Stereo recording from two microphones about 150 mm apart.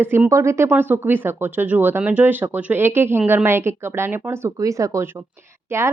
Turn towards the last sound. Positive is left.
turn(degrees=-15)  # may be behind; listen again after turning